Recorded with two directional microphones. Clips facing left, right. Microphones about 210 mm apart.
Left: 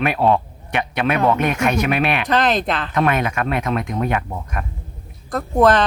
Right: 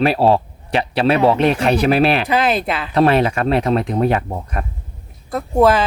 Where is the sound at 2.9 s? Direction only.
30° right (ahead or behind).